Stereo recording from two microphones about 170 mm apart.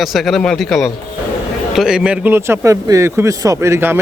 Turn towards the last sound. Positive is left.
turn(degrees=-15)  # may be behind; listen again after turning